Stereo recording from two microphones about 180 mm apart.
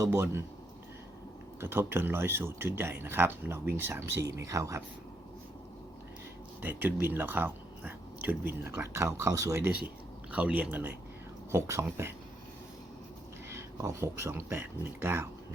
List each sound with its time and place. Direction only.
0.0 s speech: 15° right (ahead or behind)
1.6 s speech: 15° right (ahead or behind)
6.6 s speech: 10° right (ahead or behind)
13.5 s speech: 15° right (ahead or behind)